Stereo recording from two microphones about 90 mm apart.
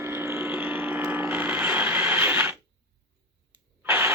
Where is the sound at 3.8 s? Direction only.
25° right (ahead or behind).